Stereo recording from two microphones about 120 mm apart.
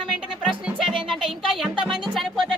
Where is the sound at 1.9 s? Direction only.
Centre (ahead or behind).